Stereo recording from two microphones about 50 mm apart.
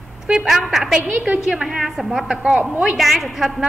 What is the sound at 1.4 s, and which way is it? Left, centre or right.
A woman's voice, centre.